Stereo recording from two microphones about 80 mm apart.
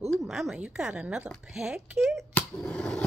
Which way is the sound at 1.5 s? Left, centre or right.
Centre.